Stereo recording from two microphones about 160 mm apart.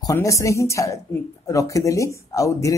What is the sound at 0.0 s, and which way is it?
Speech, 20° left (ahead or behind).